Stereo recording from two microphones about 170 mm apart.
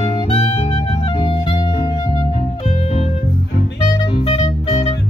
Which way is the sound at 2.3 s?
40° left (ahead or behind).